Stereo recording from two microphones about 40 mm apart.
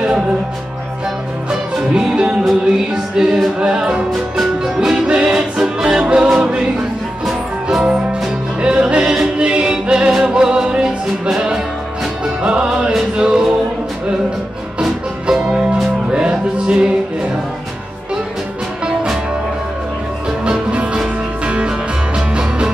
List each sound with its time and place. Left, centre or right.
1.5 s music: centre
14.8 s music: right
20.4 s music: right